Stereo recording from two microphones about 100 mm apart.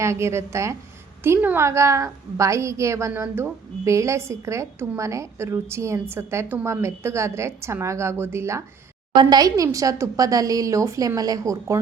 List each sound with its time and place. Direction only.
0.0 s a woman's voice: 30° right (ahead or behind)
9.1 s a woman's voice: 40° right (ahead or behind)